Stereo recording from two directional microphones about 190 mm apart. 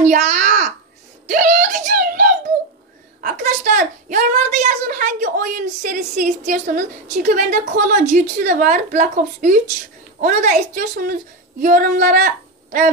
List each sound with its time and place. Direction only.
0.0 s a sound: 40° right (ahead or behind)
3.2 s a woman's voice: 40° right (ahead or behind)
10.8 s a woman's voice: 50° right (ahead or behind)